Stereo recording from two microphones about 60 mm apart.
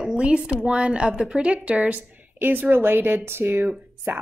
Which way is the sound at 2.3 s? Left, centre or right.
Right.